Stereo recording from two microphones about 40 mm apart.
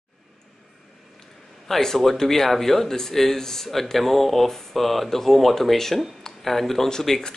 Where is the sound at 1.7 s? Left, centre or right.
Centre.